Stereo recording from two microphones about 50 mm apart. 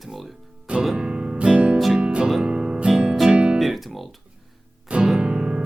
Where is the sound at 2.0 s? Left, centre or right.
Centre.